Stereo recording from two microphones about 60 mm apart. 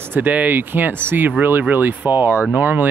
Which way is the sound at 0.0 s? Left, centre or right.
Right.